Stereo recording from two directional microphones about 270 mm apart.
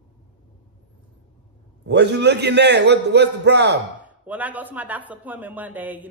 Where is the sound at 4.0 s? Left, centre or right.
Centre.